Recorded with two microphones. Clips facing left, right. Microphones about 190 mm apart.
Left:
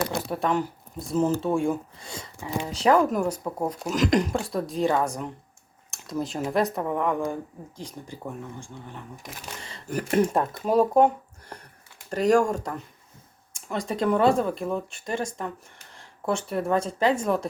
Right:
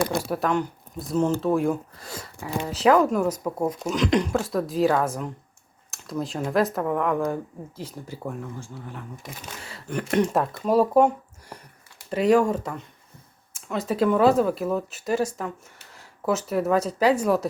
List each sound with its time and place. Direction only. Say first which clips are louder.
0.3 s speech: right 1 dB; centre (ahead or behind)
3.2 s speech: right 2 dB; 10° left (ahead or behind)
4.0 s a woman's voice: even; 40° left (ahead or behind)
4.3 s speech: right 3 dB; centre (ahead or behind)
5.9 s a sound: even; centre (ahead or behind)
6.5 s speech: right 3 dB; centre (ahead or behind)